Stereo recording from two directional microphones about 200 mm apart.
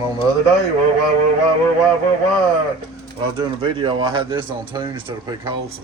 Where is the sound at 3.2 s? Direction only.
25° right (ahead or behind).